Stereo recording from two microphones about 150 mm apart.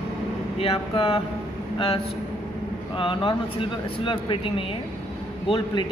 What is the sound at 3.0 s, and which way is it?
Speech, 35° left (ahead or behind).